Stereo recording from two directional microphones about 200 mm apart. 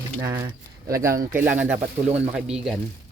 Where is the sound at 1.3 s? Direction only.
10° right (ahead or behind).